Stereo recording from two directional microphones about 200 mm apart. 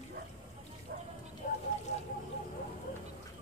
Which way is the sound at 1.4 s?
45° left (ahead or behind).